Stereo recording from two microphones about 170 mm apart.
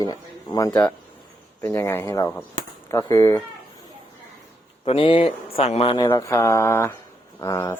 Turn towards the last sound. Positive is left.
turn(degrees=15)  # may be behind; listen again after turning